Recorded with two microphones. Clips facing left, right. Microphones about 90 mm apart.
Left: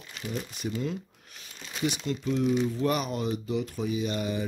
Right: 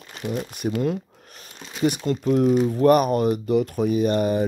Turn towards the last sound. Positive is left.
turn(degrees=-50)  # may be behind; listen again after turning